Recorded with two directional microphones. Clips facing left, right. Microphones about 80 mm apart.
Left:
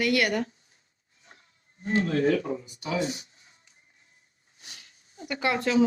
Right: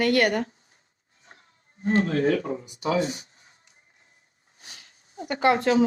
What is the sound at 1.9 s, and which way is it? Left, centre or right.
Speech, right.